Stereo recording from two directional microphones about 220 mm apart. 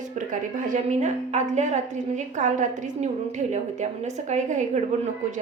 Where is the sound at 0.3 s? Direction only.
35° right (ahead or behind).